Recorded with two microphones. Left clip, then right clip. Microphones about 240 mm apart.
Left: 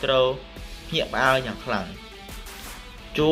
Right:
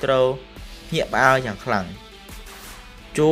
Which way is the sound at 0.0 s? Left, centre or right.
Right.